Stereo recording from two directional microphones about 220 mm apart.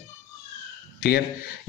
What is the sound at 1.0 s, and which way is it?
Speech, 45° left (ahead or behind).